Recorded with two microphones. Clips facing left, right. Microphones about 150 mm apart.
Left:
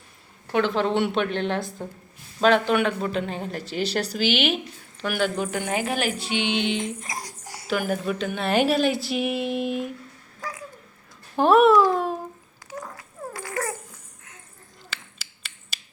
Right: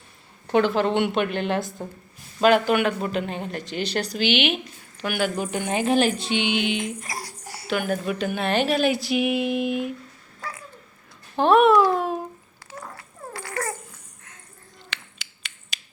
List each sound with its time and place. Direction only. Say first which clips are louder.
0.4 s a woman's voice: right 3 dB; 20° right (ahead or behind)
0.7 s a woman's voice: right 1 dB; centre (ahead or behind)
5.4 s speech: right 1 dB; 20° right (ahead or behind)
7.1 s a sound: even; 20° left (ahead or behind)
7.7 s a woman's voice: even; centre (ahead or behind)
8.4 s a woman's voice: left 1 dB; 5° left (ahead or behind)
11.3 s a child's voice: even; 5° left (ahead or behind)
13.0 s dog: left 2 dB; 15° left (ahead or behind)
14.9 s a sound: right 1 dB; 5° left (ahead or behind)